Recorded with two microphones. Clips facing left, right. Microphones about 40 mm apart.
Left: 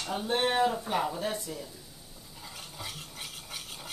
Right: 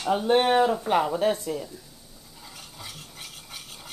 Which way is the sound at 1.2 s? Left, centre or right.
Right.